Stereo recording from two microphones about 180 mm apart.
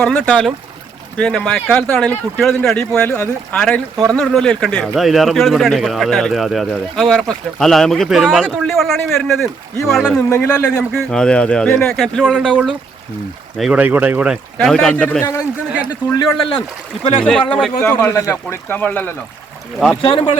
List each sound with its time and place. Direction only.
0.0 s a man's voice: 5° left (ahead or behind)
10.2 s speech: 15° left (ahead or behind)
10.9 s a man's voice: 5° left (ahead or behind)
16.1 s speech: 25° left (ahead or behind)
17.5 s speech: 5° left (ahead or behind)
20.0 s speech: 30° left (ahead or behind)